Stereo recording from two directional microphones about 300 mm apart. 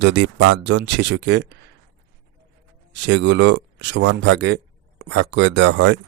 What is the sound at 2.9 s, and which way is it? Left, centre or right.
Speech, right.